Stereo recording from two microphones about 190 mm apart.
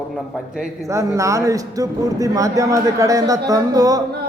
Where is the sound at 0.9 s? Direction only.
15° right (ahead or behind).